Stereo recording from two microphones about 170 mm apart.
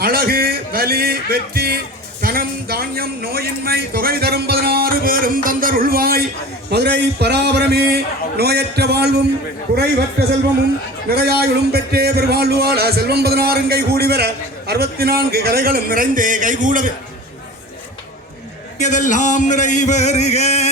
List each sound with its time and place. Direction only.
0.0 s speech: 60° right (ahead or behind)
6.7 s a man's voice: 80° right
11.1 s a man's voice: 70° right (ahead or behind); by 16.9 s 50° right (ahead or behind)
18.8 s a sound: 45° left (ahead or behind)